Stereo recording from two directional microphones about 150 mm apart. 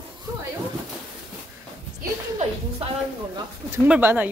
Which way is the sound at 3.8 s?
10° right (ahead or behind).